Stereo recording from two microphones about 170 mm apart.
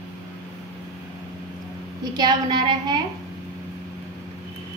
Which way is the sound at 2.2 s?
25° right (ahead or behind).